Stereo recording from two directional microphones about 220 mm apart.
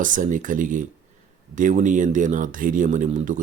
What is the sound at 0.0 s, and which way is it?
Speech, 35° right (ahead or behind).